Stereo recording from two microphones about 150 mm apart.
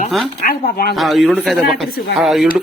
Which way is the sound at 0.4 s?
90° left.